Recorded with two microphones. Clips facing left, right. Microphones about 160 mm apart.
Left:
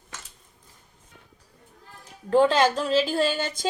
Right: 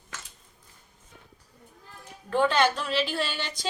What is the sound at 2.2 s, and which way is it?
A woman's voice, 30° left (ahead or behind).